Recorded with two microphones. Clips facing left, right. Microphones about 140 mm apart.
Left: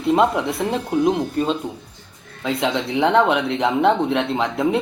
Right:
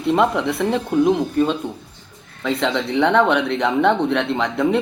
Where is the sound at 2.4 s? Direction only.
10° left (ahead or behind).